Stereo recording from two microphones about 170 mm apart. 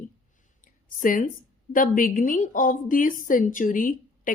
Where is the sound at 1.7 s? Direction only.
55° left (ahead or behind).